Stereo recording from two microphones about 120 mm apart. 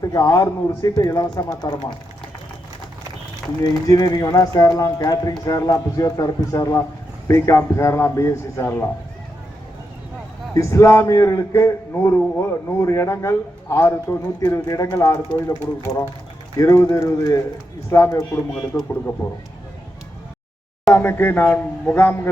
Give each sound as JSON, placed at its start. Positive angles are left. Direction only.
{"t": 0.1, "sound": "speech", "side_deg": 30}
{"t": 3.6, "sound": "a man's voice", "side_deg": 35}
{"t": 10.5, "sound": "a man's voice", "side_deg": 25}
{"t": 16.6, "sound": "a man's voice", "side_deg": 25}
{"t": 20.9, "sound": "speech", "side_deg": 15}